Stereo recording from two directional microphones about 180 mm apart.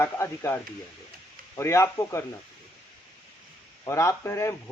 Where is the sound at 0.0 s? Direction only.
15° left (ahead or behind).